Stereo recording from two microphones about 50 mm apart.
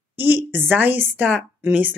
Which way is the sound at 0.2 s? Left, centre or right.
Right.